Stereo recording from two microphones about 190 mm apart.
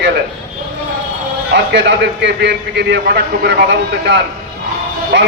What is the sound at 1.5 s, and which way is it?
A man's voice, 60° right (ahead or behind).